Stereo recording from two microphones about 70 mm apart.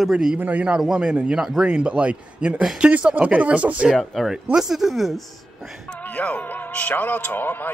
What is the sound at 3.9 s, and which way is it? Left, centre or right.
A man's voice, centre.